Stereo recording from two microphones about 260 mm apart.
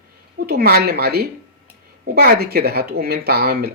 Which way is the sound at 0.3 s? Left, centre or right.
Right.